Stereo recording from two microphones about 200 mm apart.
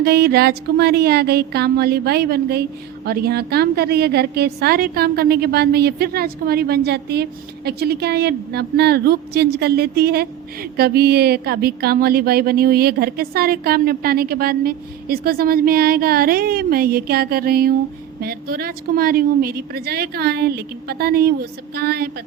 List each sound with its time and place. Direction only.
0.0 s speech: 55° right (ahead or behind)